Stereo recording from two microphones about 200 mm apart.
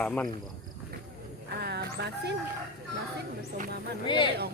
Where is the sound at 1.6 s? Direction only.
55° right (ahead or behind).